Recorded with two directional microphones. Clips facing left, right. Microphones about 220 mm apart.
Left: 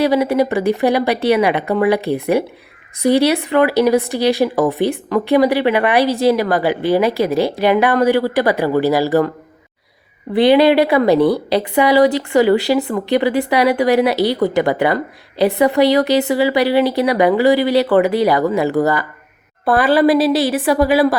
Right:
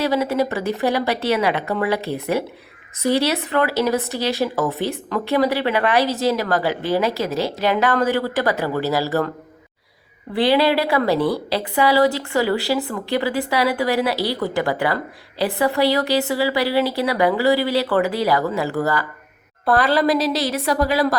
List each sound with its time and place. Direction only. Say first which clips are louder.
0.0 s speech: left 5 dB; 15° left (ahead or behind)
10.3 s a woman's voice: left 6 dB; 20° left (ahead or behind)